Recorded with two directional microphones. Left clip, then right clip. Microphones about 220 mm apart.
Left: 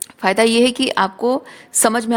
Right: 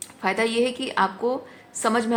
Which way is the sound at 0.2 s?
55° left (ahead or behind).